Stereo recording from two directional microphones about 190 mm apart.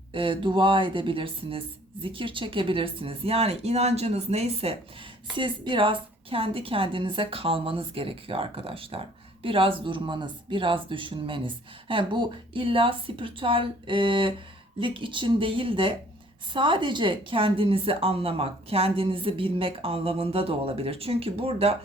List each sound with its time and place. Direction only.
0.1 s a woman's voice: 25° right (ahead or behind)